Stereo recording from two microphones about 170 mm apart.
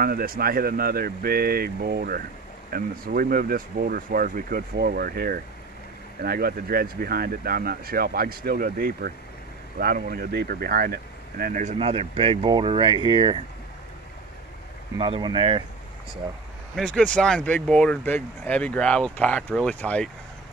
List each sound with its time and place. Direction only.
0.0 s speech: 60° right (ahead or behind)
11.8 s speech: 35° right (ahead or behind)
15.0 s speech: 30° right (ahead or behind)
16.7 s speech: 5° left (ahead or behind)